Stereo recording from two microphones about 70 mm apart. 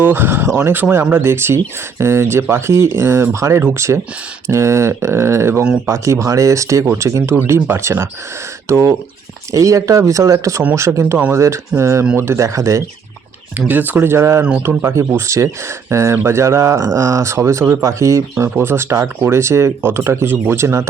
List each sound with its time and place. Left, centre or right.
0.0 s speech: right
13.7 s speech: right
18.4 s speech: right